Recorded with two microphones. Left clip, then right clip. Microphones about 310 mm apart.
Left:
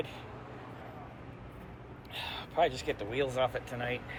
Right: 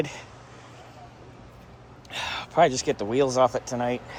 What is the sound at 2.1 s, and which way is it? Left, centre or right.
Speech, right.